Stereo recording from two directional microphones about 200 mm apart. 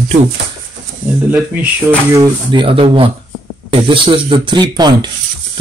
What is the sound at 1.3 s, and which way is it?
Speech, 5° right (ahead or behind).